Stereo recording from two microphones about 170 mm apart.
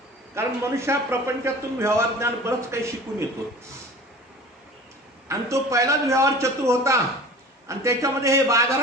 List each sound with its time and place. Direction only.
0.3 s a man's voice: 15° right (ahead or behind)
5.3 s a man's voice: 20° right (ahead or behind)